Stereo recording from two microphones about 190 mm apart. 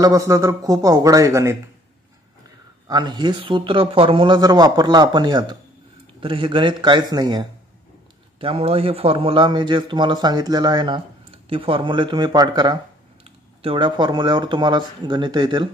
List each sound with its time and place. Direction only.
0.0 s speech: 15° right (ahead or behind)
2.9 s a man's voice: 20° right (ahead or behind)